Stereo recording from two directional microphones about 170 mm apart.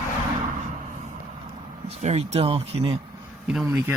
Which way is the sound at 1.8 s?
40° right (ahead or behind).